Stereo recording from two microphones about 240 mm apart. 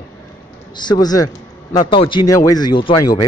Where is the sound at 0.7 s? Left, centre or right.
Centre.